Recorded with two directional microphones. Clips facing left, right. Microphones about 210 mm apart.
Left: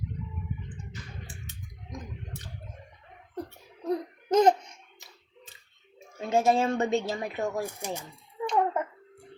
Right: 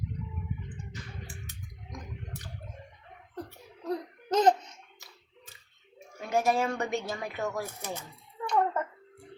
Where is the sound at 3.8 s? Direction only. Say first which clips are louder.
Left 4 dB; 10° left (ahead or behind).